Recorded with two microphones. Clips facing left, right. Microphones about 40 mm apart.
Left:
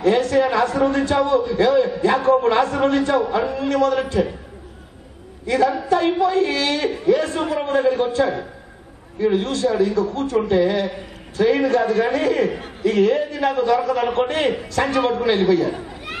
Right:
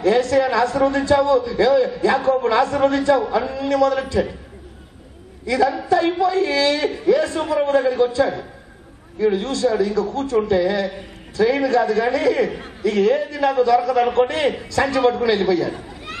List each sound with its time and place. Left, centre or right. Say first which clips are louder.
0.0 s a man's voice: even; left
5.5 s a man's voice: even; left
7.3 s a man's voice: right 3 dB; left
7.7 s a man's voice: left 1 dB; left